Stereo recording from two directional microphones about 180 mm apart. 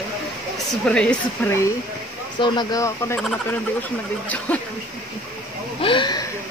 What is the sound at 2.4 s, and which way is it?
Speech, 20° left (ahead or behind).